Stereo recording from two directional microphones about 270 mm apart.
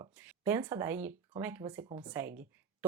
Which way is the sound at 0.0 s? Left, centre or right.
Centre.